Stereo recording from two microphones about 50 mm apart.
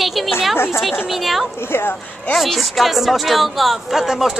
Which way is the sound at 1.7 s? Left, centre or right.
Left.